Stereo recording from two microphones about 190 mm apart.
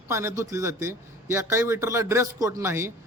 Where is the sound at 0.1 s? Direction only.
15° right (ahead or behind).